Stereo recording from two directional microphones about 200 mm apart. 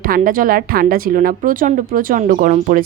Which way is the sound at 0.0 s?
45° right (ahead or behind).